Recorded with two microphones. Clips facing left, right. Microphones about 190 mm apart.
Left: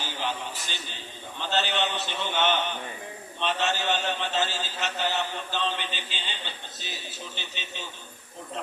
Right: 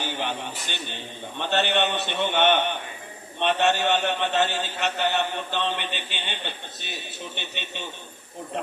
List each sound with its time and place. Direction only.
0.0 s a man's voice: 60° right (ahead or behind)